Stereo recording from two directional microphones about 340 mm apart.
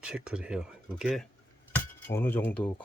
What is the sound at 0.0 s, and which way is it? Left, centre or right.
Speech, centre.